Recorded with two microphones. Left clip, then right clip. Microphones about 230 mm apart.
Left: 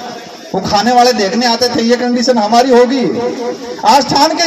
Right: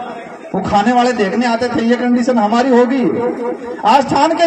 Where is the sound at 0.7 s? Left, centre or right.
Left.